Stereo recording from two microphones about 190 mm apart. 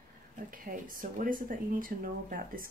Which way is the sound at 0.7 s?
45° right (ahead or behind).